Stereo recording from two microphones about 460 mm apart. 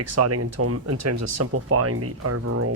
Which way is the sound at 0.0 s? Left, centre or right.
Right.